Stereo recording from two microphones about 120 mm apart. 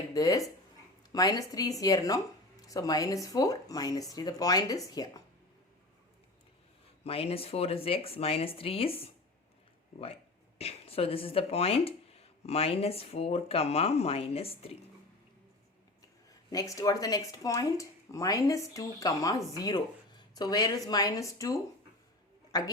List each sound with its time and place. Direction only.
0.1 s speech: 30° left (ahead or behind)
7.0 s speech: 55° left (ahead or behind)
10.6 s speech: 55° left (ahead or behind)
16.5 s a woman's voice: 30° left (ahead or behind)